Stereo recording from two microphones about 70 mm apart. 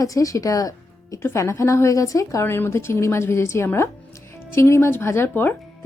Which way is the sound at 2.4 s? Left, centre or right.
Left.